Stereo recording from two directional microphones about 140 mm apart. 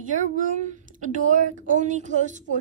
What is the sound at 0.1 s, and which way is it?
A woman's voice, 65° right (ahead or behind).